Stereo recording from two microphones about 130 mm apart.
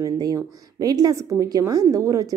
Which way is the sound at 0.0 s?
25° right (ahead or behind).